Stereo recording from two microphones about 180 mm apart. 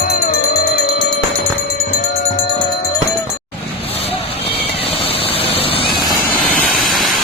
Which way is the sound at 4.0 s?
35° left (ahead or behind).